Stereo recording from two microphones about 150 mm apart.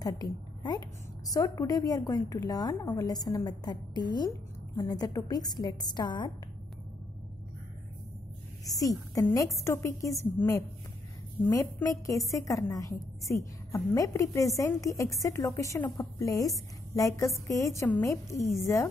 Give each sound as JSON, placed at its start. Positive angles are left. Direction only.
{"t": 0.0, "sound": "a woman's voice", "side_deg": 25}
{"t": 8.6, "sound": "a woman's voice", "side_deg": 25}
{"t": 11.4, "sound": "a woman's voice", "side_deg": 25}